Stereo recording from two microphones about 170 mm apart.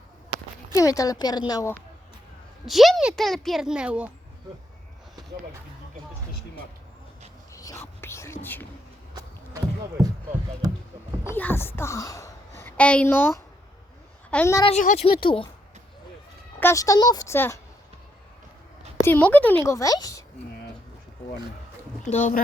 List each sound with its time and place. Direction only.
0.8 s a woman's voice: 20° left (ahead or behind)
2.6 s speech: centre (ahead or behind)
7.5 s whispering: 20° left (ahead or behind)
10.6 s a sound: 20° right (ahead or behind)
11.3 s a woman's voice: 10° left (ahead or behind)
14.8 s speech: 50° left (ahead or behind)
15.0 s speech: 30° left (ahead or behind)
16.6 s a woman's voice: 15° left (ahead or behind)
19.0 s a woman's voice: 10° left (ahead or behind)
22.0 s speech: 45° left (ahead or behind)